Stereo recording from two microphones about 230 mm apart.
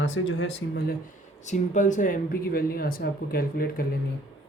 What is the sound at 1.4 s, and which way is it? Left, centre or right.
Speech, left.